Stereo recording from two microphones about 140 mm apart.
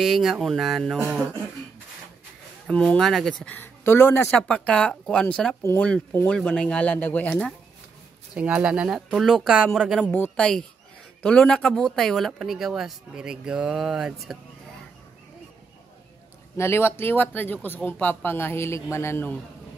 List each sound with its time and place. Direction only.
0.0 s speech: centre (ahead or behind)
2.7 s speech: 5° left (ahead or behind)
8.4 s speech: 10° right (ahead or behind)
16.5 s speech: 20° left (ahead or behind)